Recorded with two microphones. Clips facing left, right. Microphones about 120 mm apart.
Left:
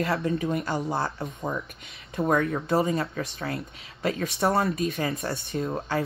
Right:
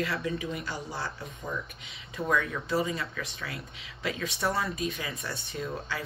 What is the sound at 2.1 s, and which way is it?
Speech, 45° left (ahead or behind).